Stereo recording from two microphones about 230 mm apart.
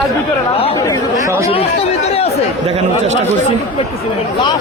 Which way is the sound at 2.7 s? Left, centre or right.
Right.